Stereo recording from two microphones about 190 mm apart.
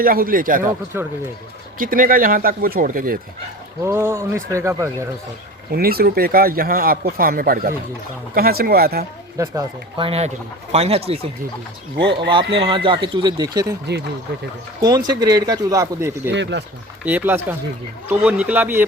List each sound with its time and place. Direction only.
0.0 s speech: 50° right (ahead or behind)
1.8 s speech: 45° right (ahead or behind)
3.8 s speech: 15° right (ahead or behind)
5.7 s speech: 55° right (ahead or behind)
9.4 s speech: 20° right (ahead or behind)
10.1 s speech: 35° right (ahead or behind)
11.9 s speech: 65° right (ahead or behind)
12.3 s speech: 25° right (ahead or behind)
14.8 s speech: 20° right (ahead or behind)
16.3 s speech: 65° right (ahead or behind)
17.1 s speech: 10° right (ahead or behind)